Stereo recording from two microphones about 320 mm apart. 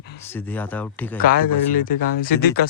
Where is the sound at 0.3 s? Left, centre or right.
Centre.